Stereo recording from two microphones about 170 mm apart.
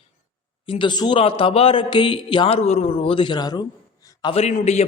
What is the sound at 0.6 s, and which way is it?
A man's voice, 30° left (ahead or behind).